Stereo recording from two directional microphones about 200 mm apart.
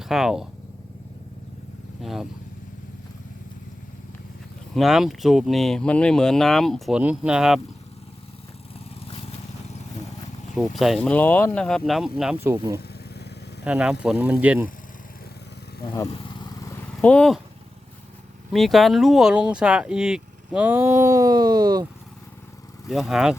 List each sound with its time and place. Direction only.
0.0 s speech: centre (ahead or behind)
2.0 s speech: centre (ahead or behind)
4.7 s speech: centre (ahead or behind)
10.5 s speech: centre (ahead or behind)
16.0 s vehicle: 25° left (ahead or behind); by 17.4 s 5° left (ahead or behind)
18.5 s speech: centre (ahead or behind); by 21.8 s 20° right (ahead or behind)
22.9 s speech: centre (ahead or behind)